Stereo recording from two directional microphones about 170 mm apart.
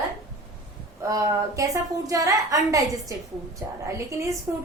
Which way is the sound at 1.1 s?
20° right (ahead or behind).